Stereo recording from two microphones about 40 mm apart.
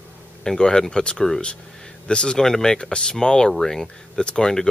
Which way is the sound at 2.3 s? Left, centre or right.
Centre.